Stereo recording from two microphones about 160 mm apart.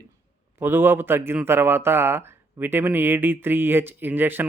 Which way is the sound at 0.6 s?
15° right (ahead or behind).